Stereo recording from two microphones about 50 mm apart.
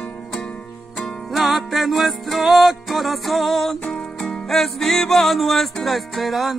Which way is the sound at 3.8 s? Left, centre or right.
Left.